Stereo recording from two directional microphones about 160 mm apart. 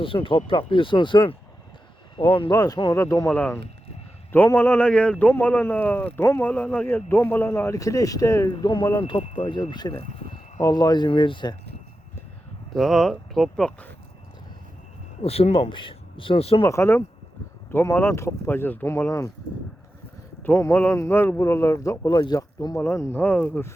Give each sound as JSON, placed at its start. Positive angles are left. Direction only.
{"t": 0.0, "sound": "speech", "side_deg": 35}
{"t": 12.7, "sound": "speech", "side_deg": 0}
{"t": 15.2, "sound": "speech", "side_deg": 40}
{"t": 16.6, "sound": "speech", "side_deg": 15}
{"t": 20.4, "sound": "speech", "side_deg": 15}